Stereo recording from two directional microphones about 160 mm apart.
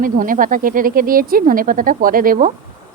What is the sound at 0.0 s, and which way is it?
Speech, 60° right (ahead or behind).